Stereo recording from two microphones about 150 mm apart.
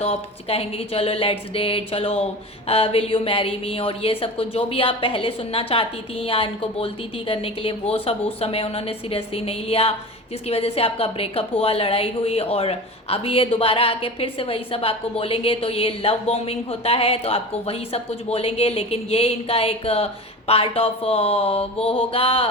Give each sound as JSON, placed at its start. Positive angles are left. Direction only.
{"t": 0.0, "sound": "a woman's voice", "side_deg": 40}